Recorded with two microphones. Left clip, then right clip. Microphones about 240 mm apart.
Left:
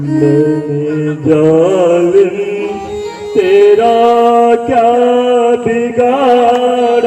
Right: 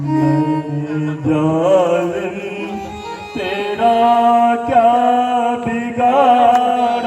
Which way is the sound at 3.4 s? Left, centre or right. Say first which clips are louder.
Left 12 dB; left.